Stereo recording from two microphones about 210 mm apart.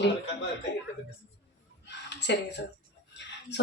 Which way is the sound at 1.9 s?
55° left (ahead or behind).